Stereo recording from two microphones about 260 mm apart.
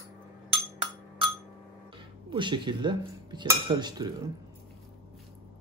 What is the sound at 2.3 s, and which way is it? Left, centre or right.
Cutlery, centre.